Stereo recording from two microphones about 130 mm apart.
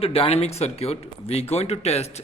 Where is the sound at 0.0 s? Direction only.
50° left (ahead or behind).